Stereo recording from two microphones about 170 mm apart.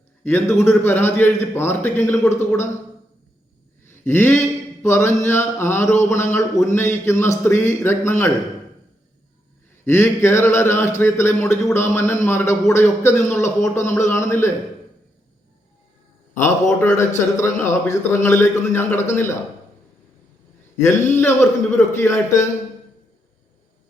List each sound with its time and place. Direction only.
0.3 s a man's voice: 15° left (ahead or behind)
4.0 s a man's voice: 10° left (ahead or behind)
9.8 s a man's voice: 15° left (ahead or behind)
16.4 s a man's voice: 15° left (ahead or behind)
20.7 s a man's voice: 15° left (ahead or behind)